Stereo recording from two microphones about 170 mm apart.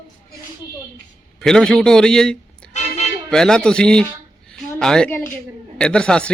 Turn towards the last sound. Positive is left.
turn(degrees=5)  # may be behind; listen again after turning